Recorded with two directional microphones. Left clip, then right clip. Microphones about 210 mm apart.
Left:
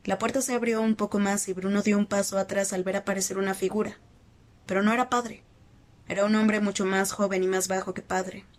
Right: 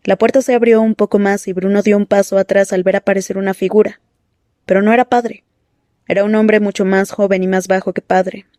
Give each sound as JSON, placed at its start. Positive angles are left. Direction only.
{"t": 0.0, "sound": "speech", "side_deg": -45}